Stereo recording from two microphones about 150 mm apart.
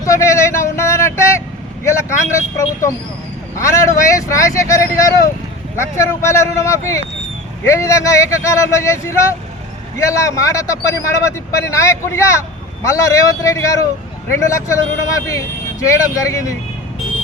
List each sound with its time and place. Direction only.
0.0 s vehicle: 20° left (ahead or behind)
1.8 s a man's voice: 20° left (ahead or behind)